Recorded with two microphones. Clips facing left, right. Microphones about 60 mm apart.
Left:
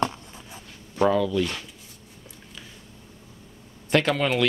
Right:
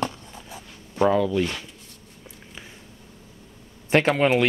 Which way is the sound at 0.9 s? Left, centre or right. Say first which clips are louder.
Right 1 dB; centre.